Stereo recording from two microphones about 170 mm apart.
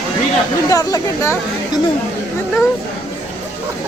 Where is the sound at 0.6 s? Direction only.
20° left (ahead or behind).